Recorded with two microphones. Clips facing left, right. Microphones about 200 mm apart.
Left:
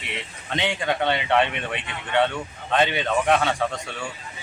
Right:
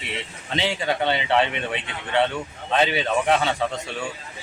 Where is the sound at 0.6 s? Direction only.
5° right (ahead or behind).